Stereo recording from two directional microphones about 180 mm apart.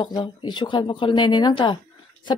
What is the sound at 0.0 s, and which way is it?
Speech, 25° left (ahead or behind).